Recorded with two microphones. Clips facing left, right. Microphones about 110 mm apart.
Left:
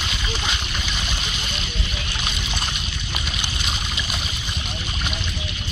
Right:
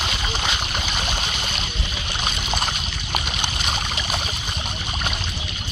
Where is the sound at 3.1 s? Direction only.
55° right (ahead or behind).